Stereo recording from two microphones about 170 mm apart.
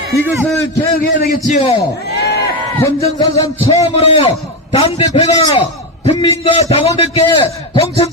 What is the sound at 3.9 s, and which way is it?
A man's voice, 35° left (ahead or behind).